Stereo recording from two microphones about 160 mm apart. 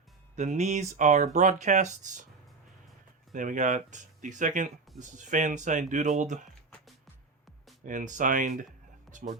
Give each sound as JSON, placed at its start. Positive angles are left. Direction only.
{"t": 0.3, "sound": "speech", "side_deg": -45}
{"t": 3.3, "sound": "speech", "side_deg": -55}
{"t": 7.9, "sound": "speech", "side_deg": -55}